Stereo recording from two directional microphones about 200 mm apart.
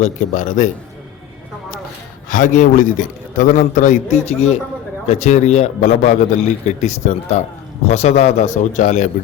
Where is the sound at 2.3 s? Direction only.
40° left (ahead or behind).